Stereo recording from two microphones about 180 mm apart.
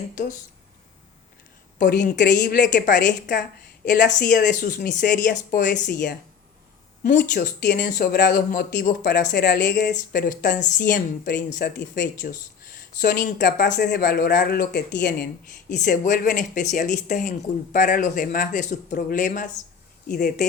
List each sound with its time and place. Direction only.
2.0 s speech: 45° left (ahead or behind)
3.1 s speech: 70° left (ahead or behind)
4.4 s speech: 50° left (ahead or behind); by 9.7 s 65° left (ahead or behind)
9.9 s speech: 50° left (ahead or behind); by 15.3 s 70° left (ahead or behind)
15.7 s speech: 45° left (ahead or behind)